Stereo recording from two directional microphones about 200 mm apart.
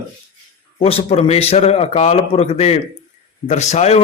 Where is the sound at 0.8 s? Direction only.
30° left (ahead or behind).